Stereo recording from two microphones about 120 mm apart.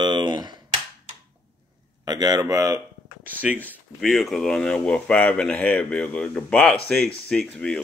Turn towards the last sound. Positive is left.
turn(degrees=5)  # may be behind; listen again after turning